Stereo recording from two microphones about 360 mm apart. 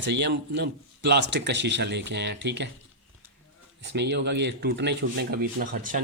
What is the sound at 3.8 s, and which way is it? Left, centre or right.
Speech, right.